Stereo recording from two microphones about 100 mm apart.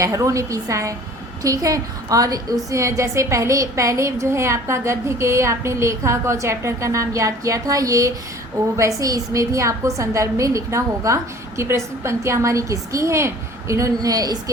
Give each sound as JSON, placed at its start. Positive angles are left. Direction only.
{"t": 0.0, "sound": "a woman's voice", "side_deg": -30}